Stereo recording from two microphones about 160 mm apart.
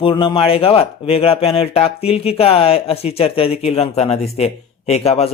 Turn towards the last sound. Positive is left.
turn(degrees=40)  # may be behind; listen again after turning